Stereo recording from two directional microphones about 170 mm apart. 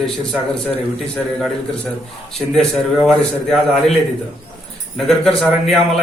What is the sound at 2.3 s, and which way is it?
A man's voice, centre (ahead or behind).